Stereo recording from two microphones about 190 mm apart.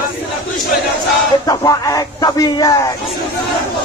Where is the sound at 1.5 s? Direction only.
20° left (ahead or behind).